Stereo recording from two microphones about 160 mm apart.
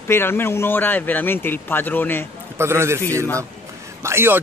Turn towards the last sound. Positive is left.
turn(degrees=-15)  # may be behind; listen again after turning